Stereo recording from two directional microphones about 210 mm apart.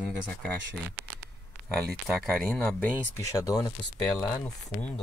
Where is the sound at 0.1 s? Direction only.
5° left (ahead or behind).